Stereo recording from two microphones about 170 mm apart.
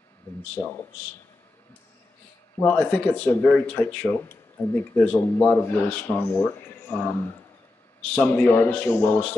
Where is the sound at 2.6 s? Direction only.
10° left (ahead or behind).